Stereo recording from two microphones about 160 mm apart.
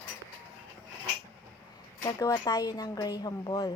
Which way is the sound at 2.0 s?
20° left (ahead or behind).